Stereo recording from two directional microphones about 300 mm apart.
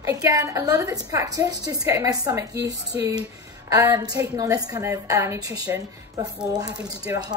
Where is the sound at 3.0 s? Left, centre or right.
Centre.